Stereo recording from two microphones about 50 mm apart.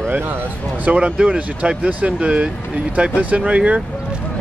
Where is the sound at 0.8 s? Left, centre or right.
Right.